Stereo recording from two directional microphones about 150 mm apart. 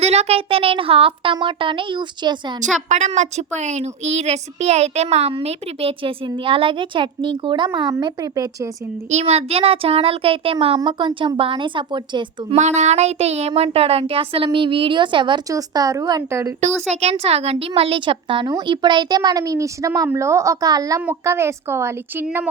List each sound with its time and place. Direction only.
0.0 s a woman's voice: 45° right (ahead or behind)
2.9 s a woman's voice: 50° right (ahead or behind); by 8.7 s 25° right (ahead or behind)
9.0 s a woman's voice: 45° right (ahead or behind); by 12.5 s 30° right (ahead or behind)
12.5 s a child's voice: 50° right (ahead or behind); by 16.5 s 20° right (ahead or behind)
16.9 s a woman's voice: 45° right (ahead or behind); by 22.4 s 15° right (ahead or behind)